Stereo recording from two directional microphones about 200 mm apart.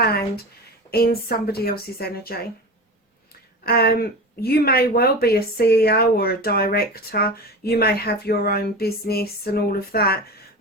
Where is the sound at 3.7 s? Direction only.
50° left (ahead or behind).